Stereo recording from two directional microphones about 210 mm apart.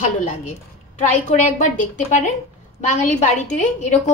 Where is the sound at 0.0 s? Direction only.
35° left (ahead or behind).